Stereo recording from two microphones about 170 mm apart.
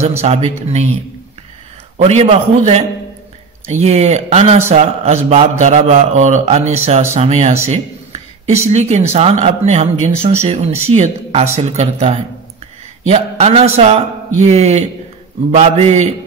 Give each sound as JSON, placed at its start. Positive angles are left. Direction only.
{"t": 0.2, "sound": "a man's voice", "side_deg": -40}
{"t": 2.0, "sound": "a man's voice", "side_deg": -45}
{"t": 7.6, "sound": "a sound", "side_deg": -40}
{"t": 8.6, "sound": "a man's voice", "side_deg": -40}